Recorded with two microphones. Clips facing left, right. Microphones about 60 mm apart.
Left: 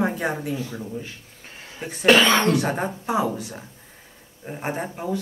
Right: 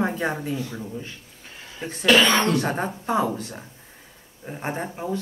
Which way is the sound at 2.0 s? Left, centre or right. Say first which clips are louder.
Left 1 dB; left.